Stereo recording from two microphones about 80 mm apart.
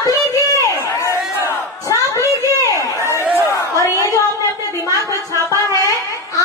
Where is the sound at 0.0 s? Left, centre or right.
Left.